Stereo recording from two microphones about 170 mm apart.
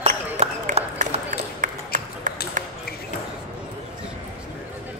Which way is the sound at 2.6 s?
50° right (ahead or behind).